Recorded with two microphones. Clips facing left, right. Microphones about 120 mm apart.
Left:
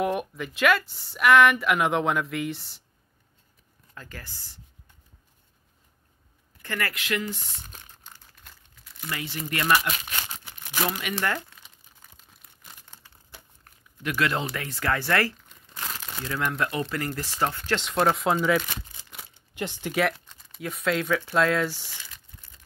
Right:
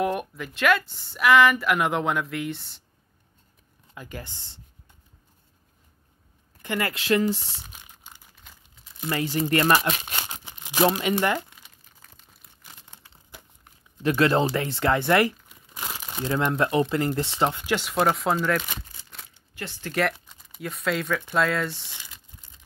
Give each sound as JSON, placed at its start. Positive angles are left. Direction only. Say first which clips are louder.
{"t": 0.0, "sound": "speech", "louder": "even", "side_deg": 0}
{"t": 3.9, "sound": "speech", "louder": "right 5 dB", "side_deg": -15}
{"t": 6.6, "sound": "speech", "louder": "right 3 dB", "side_deg": -20}
{"t": 7.5, "sound": "a sound", "louder": "even", "side_deg": -10}
{"t": 8.8, "sound": "crumpling", "louder": "right 7 dB", "side_deg": -25}
{"t": 9.1, "sound": "speech", "louder": "right 9 dB", "side_deg": -40}
{"t": 10.2, "sound": "crumpling", "louder": "right 2 dB", "side_deg": -20}
{"t": 13.1, "sound": "crumpling", "louder": "right 4 dB", "side_deg": -20}
{"t": 14.0, "sound": "speech", "louder": "right 6 dB", "side_deg": -35}
{"t": 15.4, "sound": "crumpling", "louder": "right 1 dB", "side_deg": -10}
{"t": 16.2, "sound": "speech", "louder": "right 5 dB", "side_deg": -25}
{"t": 19.5, "sound": "speech", "louder": "left 4 dB", "side_deg": 20}
{"t": 19.9, "sound": "speech", "louder": "right 1 dB", "side_deg": 0}
{"t": 21.8, "sound": "crumpling", "louder": "even", "side_deg": -15}